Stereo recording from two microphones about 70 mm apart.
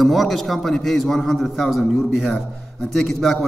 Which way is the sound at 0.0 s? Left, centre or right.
Centre.